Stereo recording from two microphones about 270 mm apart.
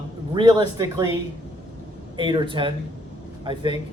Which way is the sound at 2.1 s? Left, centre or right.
Centre.